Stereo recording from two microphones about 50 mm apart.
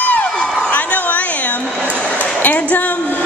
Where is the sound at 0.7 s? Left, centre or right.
Left.